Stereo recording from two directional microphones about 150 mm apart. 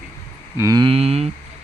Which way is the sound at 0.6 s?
25° right (ahead or behind).